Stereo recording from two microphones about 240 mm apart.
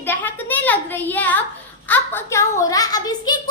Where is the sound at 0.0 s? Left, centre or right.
Centre.